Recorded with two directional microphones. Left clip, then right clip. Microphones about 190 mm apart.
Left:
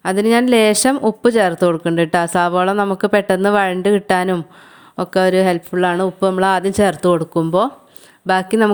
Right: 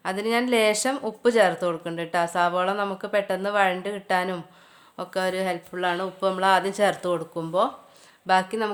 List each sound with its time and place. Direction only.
0.0 s speech: 40° left (ahead or behind)